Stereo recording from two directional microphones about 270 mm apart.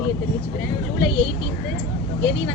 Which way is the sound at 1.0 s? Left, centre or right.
Left.